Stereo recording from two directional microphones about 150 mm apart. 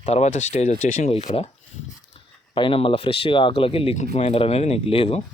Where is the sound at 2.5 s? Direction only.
35° left (ahead or behind).